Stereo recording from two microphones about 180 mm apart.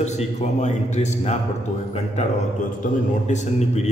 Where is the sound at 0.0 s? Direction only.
40° left (ahead or behind).